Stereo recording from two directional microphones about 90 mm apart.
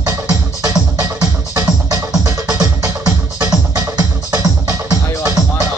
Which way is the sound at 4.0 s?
35° right (ahead or behind).